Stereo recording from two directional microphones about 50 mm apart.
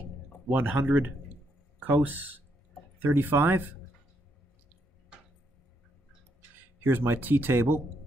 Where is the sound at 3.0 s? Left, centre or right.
Right.